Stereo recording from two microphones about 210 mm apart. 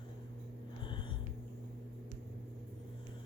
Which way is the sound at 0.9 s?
25° left (ahead or behind).